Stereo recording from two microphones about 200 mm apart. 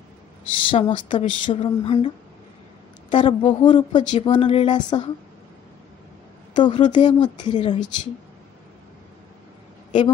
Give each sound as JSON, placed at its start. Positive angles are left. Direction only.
{"t": 0.5, "sound": "speech", "side_deg": 25}
{"t": 6.5, "sound": "speech", "side_deg": 25}